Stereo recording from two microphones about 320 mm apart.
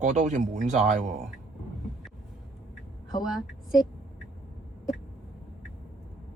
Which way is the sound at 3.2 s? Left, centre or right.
Centre.